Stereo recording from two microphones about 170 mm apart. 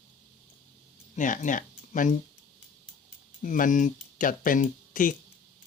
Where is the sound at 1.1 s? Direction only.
50° left (ahead or behind).